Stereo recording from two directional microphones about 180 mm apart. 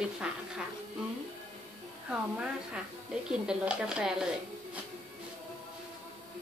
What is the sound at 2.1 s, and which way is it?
A woman's voice, 5° right (ahead or behind).